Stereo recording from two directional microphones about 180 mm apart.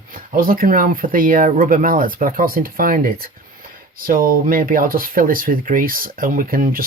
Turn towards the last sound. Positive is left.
turn(degrees=-50)  # may be behind; listen again after turning